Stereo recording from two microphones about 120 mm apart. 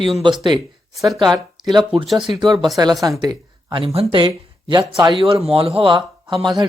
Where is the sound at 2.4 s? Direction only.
40° right (ahead or behind).